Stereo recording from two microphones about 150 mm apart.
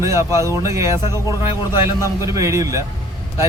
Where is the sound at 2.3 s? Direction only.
20° right (ahead or behind).